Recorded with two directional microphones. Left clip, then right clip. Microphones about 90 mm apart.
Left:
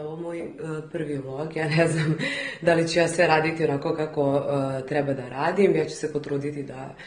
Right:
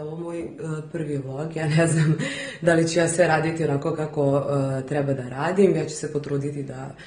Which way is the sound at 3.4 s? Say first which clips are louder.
Left 1 dB; 40° right (ahead or behind).